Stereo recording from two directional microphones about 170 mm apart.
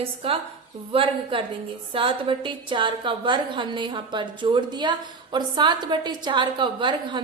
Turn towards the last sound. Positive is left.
turn(degrees=-30)  # may be behind; listen again after turning